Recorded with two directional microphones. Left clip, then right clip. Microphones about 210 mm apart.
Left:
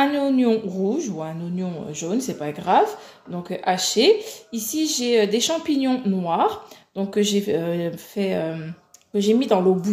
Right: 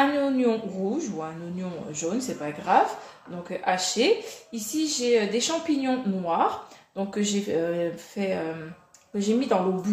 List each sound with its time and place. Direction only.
0.0 s speech: 40° left (ahead or behind)